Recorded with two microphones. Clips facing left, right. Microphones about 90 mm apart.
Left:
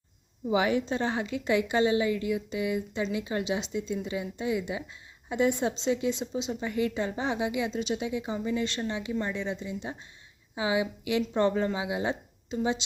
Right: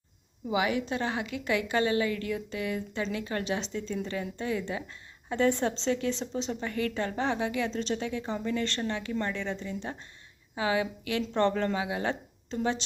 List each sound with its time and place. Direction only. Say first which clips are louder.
0.5 s a woman's voice: left 2 dB; 30° left (ahead or behind); by 12.8 s 10° left (ahead or behind)